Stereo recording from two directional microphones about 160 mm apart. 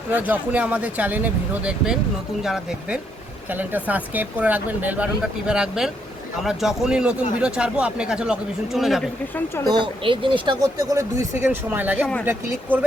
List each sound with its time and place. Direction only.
0.1 s speech: 10° right (ahead or behind)
9.6 s speech: 30° right (ahead or behind); by 12.8 s 10° right (ahead or behind)